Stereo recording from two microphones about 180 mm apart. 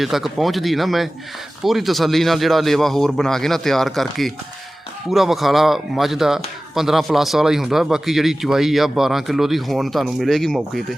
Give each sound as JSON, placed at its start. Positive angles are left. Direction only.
{"t": 0.0, "sound": "a man's voice", "side_deg": 0}